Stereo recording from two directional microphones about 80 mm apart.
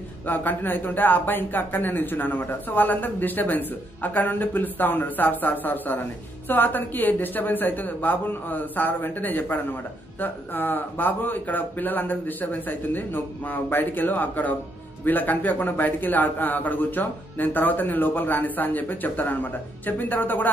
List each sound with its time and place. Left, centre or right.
0.3 s a man's voice: left